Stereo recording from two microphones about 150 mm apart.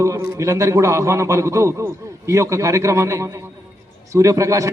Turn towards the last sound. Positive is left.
turn(degrees=-20)  # may be behind; listen again after turning